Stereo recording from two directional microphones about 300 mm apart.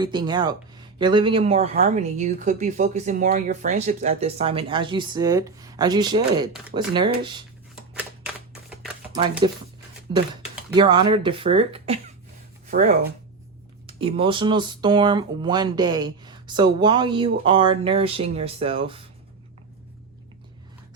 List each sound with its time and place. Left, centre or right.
0.0 s speech: centre
9.1 s speech: centre
10.8 s speech: centre